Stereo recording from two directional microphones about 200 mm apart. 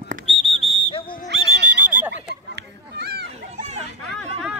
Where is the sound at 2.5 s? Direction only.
55° right (ahead or behind).